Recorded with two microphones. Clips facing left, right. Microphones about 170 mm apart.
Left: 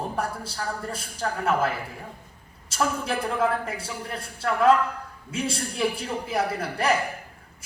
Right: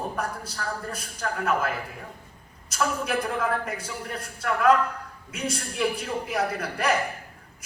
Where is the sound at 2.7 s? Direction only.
30° left (ahead or behind).